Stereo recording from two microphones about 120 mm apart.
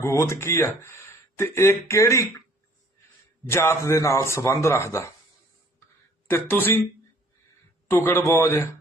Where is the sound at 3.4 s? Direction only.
20° left (ahead or behind).